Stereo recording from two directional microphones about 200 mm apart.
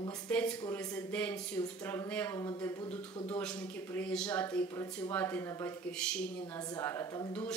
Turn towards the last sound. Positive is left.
turn(degrees=15)  # may be behind; listen again after turning